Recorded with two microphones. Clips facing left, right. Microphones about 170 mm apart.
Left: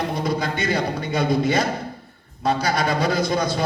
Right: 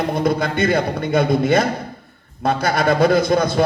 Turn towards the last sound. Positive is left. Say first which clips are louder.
# right 6 dB
turn(degrees=-55)  # may be behind; listen again after turning